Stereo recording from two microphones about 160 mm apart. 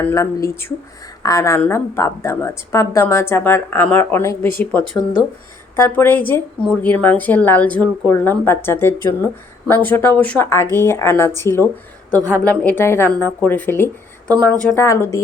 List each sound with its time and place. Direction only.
0.0 s a woman's voice: 20° left (ahead or behind)